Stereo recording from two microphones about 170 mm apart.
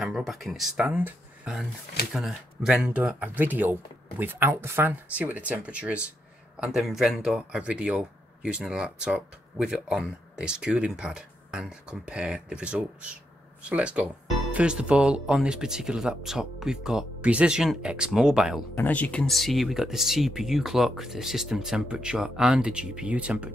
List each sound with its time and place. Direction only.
0.0 s speech: centre (ahead or behind)
18.8 s speech: 10° left (ahead or behind); by 23.5 s 5° right (ahead or behind)